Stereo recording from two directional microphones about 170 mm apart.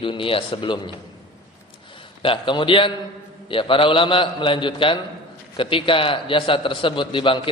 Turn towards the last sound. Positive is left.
turn(degrees=30)  # may be behind; listen again after turning